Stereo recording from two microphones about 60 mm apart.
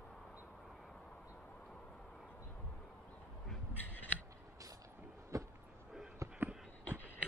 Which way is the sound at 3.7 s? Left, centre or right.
Left.